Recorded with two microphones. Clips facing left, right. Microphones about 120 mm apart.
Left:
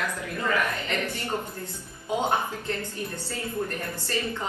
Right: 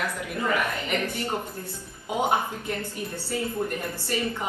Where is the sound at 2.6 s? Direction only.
15° right (ahead or behind).